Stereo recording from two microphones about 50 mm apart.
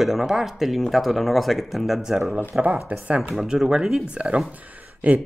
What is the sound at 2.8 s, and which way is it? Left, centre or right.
Speech, right.